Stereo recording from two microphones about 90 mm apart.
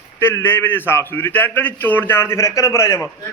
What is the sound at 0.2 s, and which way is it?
A man's voice, 25° left (ahead or behind).